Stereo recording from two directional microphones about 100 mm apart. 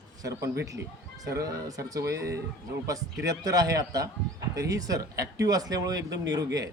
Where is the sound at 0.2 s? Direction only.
35° right (ahead or behind).